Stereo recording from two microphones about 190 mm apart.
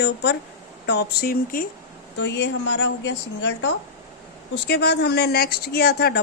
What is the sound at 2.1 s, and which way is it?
A woman's voice, 65° left (ahead or behind).